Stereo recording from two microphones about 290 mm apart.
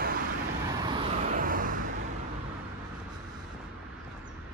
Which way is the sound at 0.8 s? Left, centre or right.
Centre.